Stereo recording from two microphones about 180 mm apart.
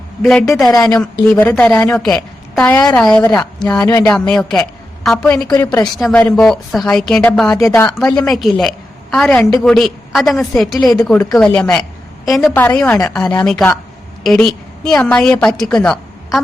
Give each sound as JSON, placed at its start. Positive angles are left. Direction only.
{"t": 0.2, "sound": "a woman's voice", "side_deg": 5}
{"t": 0.8, "sound": "a woman's voice", "side_deg": 20}
{"t": 1.3, "sound": "a woman's voice", "side_deg": 10}